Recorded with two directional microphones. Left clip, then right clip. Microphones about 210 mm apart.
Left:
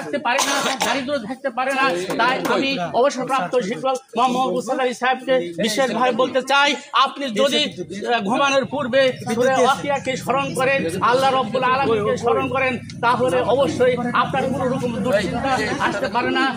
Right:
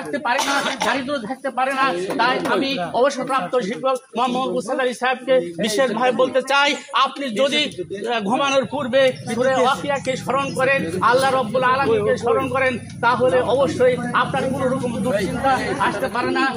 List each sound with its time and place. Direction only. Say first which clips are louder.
0.4 s speech: left 1 dB; 35° left (ahead or behind)
0.8 s speech: even; 15° left (ahead or behind)
15.8 s speech: even; 15° left (ahead or behind)